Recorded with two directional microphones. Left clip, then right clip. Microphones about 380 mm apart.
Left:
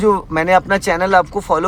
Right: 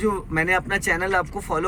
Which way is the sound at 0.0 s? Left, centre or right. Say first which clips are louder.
Left 8 dB; centre.